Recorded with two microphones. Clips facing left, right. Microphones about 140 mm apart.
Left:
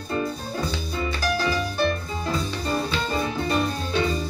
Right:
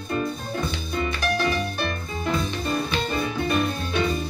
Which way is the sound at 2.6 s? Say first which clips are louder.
Even; 30° left (ahead or behind).